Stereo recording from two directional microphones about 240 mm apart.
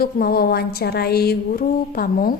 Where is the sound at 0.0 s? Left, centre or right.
Left.